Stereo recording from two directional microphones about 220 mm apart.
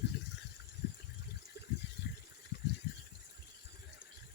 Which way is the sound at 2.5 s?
45° left (ahead or behind).